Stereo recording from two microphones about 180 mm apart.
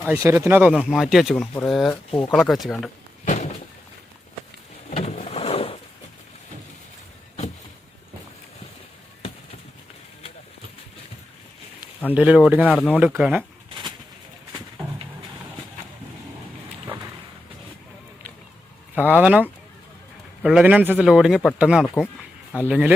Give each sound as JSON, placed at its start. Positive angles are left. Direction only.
{"t": 0.0, "sound": "a man's voice", "side_deg": -10}
{"t": 3.2, "sound": "a sound", "side_deg": 40}
{"t": 4.9, "sound": "vehicle", "side_deg": 35}
{"t": 12.1, "sound": "speech", "side_deg": -5}
{"t": 12.7, "sound": "speech", "side_deg": 10}
{"t": 13.0, "sound": "a man's voice", "side_deg": -5}
{"t": 13.7, "sound": "a sound", "side_deg": -25}
{"t": 14.5, "sound": "a sound", "side_deg": -15}
{"t": 18.9, "sound": "a man's voice", "side_deg": -10}
{"t": 22.6, "sound": "speech", "side_deg": -10}